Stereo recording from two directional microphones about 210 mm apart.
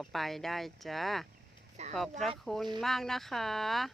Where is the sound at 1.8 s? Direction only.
30° right (ahead or behind).